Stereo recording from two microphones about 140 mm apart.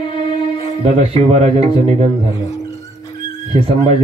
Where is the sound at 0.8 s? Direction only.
50° right (ahead or behind).